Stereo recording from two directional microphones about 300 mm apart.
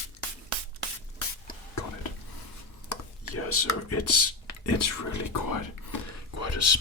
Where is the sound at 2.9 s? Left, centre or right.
Left.